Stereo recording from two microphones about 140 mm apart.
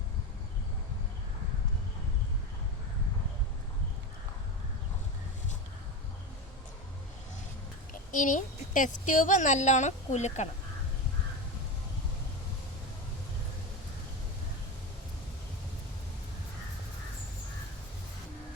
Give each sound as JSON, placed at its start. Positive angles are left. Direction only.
{"t": 8.1, "sound": "a woman's voice", "side_deg": 65}